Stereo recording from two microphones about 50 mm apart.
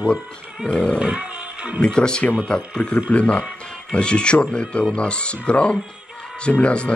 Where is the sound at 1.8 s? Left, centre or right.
Centre.